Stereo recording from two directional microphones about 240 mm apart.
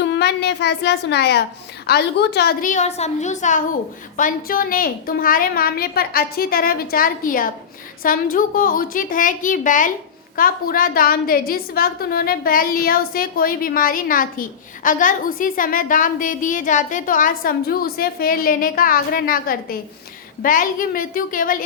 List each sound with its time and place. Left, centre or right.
0.0 s a woman's voice: left